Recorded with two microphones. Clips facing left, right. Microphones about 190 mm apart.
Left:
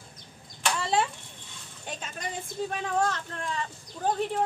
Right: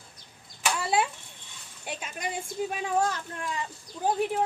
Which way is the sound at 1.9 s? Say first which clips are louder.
Right 2 dB; 10° right (ahead or behind).